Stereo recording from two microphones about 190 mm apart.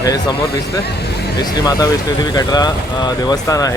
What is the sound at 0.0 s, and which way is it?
Speech, 20° left (ahead or behind).